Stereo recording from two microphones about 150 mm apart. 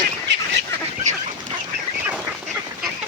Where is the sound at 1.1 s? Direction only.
55° right (ahead or behind).